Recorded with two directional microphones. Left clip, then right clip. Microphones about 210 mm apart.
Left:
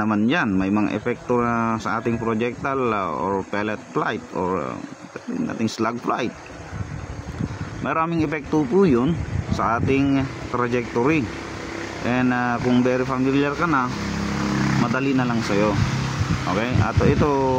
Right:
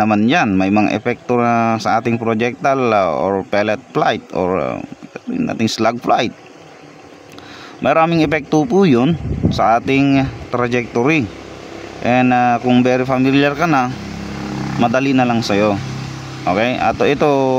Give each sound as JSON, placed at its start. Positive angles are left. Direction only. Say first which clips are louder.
{"t": 0.0, "sound": "speech", "louder": "right 7 dB", "side_deg": -50}
{"t": 7.8, "sound": "speech", "louder": "right 9 dB", "side_deg": -55}
{"t": 14.9, "sound": "speech", "louder": "right 8 dB", "side_deg": -50}